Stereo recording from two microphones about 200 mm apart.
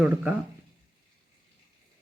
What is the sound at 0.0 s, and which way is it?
Speech, 5° right (ahead or behind).